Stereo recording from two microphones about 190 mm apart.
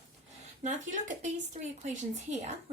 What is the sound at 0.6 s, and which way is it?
A woman's voice, 40° right (ahead or behind).